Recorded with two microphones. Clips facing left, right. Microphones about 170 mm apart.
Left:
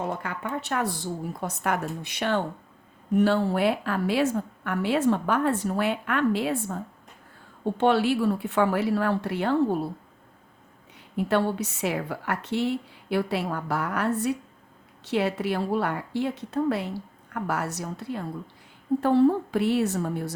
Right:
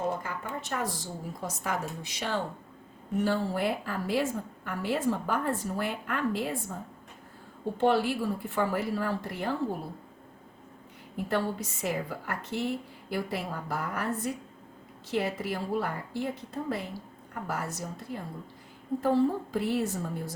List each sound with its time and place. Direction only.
0.2 s a woman's voice: 70° left (ahead or behind)
7.8 s a woman's voice: 70° left (ahead or behind)
11.2 s a woman's voice: 70° left (ahead or behind)